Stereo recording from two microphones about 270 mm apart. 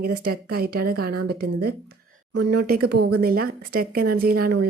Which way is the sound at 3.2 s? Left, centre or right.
Right.